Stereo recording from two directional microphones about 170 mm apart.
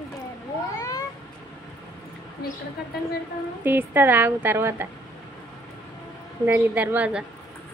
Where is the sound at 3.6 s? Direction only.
10° right (ahead or behind).